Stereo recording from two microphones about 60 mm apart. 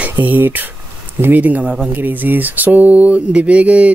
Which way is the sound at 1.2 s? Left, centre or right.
Right.